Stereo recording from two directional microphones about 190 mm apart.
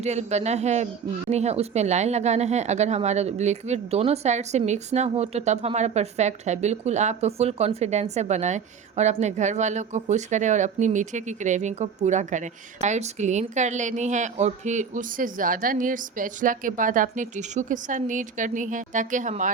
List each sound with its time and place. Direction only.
0.0 s a woman's voice: 35° right (ahead or behind)